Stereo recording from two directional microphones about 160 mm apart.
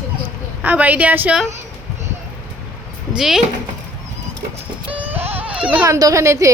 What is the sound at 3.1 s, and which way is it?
Speech, centre (ahead or behind).